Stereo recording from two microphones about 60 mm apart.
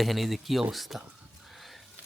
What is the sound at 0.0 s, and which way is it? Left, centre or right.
Speech, centre.